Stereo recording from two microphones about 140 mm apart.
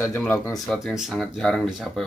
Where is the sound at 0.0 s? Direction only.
15° left (ahead or behind).